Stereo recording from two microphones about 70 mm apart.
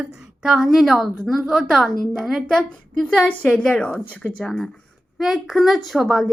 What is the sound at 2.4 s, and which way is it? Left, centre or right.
A woman's voice, centre.